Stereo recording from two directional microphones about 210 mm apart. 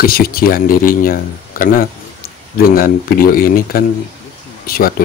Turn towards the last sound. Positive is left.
turn(degrees=45)  # may be behind; listen again after turning